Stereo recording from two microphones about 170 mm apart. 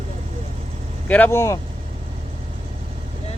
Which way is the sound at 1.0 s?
10° left (ahead or behind).